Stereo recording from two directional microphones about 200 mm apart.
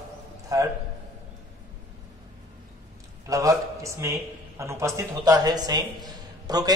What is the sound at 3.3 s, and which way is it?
A man's voice, 15° right (ahead or behind).